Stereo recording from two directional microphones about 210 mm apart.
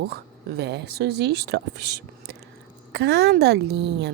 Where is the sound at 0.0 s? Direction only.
50° right (ahead or behind).